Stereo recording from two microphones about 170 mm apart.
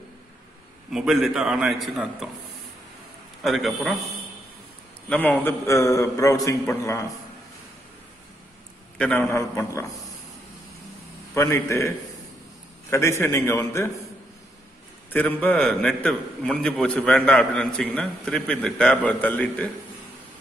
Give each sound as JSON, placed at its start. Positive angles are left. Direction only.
{"t": 0.9, "sound": "a man's voice", "side_deg": 0}
{"t": 3.4, "sound": "a man's voice", "side_deg": 0}
{"t": 5.1, "sound": "a man's voice", "side_deg": 10}
{"t": 8.9, "sound": "a man's voice", "side_deg": 10}
{"t": 11.3, "sound": "a man's voice", "side_deg": 15}
{"t": 12.9, "sound": "a man's voice", "side_deg": 15}
{"t": 15.1, "sound": "a man's voice", "side_deg": 10}